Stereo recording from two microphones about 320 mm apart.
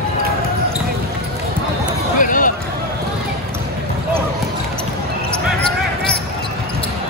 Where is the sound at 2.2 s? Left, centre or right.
Left.